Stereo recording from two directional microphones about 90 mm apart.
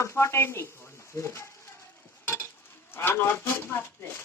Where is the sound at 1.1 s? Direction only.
35° left (ahead or behind).